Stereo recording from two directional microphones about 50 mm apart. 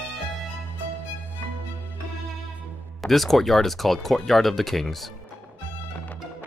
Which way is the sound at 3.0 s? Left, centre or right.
Centre.